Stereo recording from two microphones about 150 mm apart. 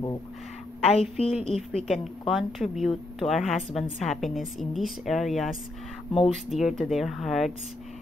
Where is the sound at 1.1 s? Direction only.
45° left (ahead or behind).